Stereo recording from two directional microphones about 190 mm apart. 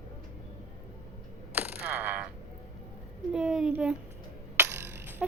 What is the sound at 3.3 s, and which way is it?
Speech, 5° right (ahead or behind).